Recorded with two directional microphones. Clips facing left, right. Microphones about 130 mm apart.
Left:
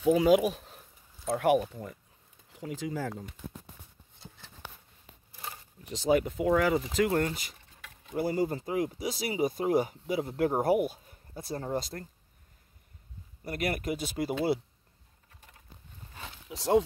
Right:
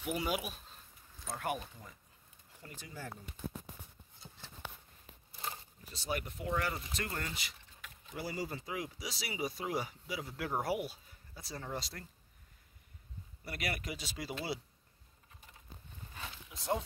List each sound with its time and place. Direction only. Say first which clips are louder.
0.2 s speech: left 14 dB; 90° left; by 2.0 s 70° left (ahead or behind)
2.5 s speech: left 15 dB; 90° left
5.9 s speech: left 13 dB; 90° left
7.2 s speech: left 9 dB; 45° left (ahead or behind)
13.4 s speech: left 8 dB; 45° left (ahead or behind)
16.4 s speech: left 11 dB; 80° left